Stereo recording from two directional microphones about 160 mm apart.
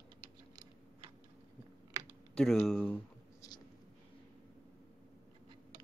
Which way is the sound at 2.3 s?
5° left (ahead or behind).